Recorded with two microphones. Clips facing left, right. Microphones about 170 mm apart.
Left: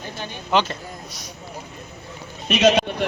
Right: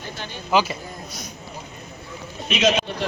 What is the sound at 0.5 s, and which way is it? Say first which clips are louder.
Speech: even; 5° right (ahead or behind).